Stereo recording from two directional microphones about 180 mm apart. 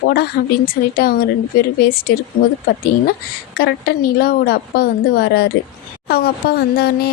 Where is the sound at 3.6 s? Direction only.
60° left (ahead or behind).